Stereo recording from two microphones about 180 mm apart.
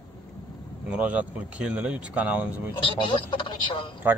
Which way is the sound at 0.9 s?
5° right (ahead or behind).